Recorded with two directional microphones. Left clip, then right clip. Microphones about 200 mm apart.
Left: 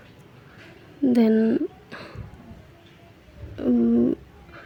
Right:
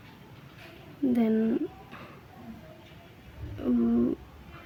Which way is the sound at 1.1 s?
25° left (ahead or behind).